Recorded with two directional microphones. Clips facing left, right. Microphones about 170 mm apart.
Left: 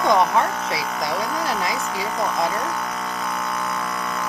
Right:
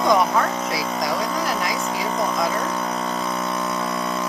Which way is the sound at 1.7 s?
25° right (ahead or behind).